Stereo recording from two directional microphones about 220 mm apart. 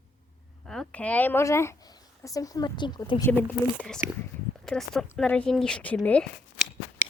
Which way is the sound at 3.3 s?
10° left (ahead or behind).